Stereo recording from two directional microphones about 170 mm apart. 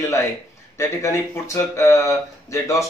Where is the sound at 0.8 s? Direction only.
15° left (ahead or behind).